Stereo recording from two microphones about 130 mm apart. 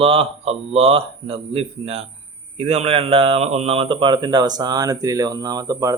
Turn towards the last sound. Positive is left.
turn(degrees=-30)  # may be behind; listen again after turning